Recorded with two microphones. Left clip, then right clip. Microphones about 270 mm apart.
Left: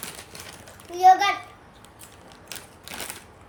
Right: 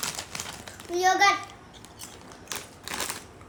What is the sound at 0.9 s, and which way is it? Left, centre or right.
Speech, centre.